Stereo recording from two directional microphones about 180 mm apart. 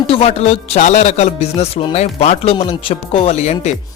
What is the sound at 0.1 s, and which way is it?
Speech, 35° left (ahead or behind).